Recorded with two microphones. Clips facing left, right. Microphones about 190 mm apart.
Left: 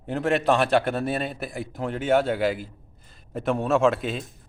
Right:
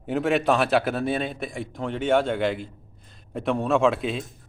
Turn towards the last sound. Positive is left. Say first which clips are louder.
# even
turn(degrees=0)  # may be behind; listen again after turning